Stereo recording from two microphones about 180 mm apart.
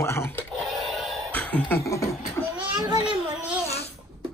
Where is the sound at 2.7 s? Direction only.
20° right (ahead or behind).